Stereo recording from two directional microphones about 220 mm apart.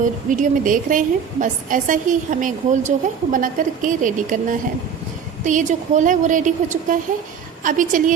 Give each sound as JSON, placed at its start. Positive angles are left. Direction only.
{"t": 0.3, "sound": "a woman's voice", "side_deg": -35}